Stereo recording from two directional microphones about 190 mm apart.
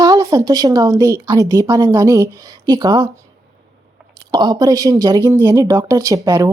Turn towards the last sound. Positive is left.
turn(degrees=-20)  # may be behind; listen again after turning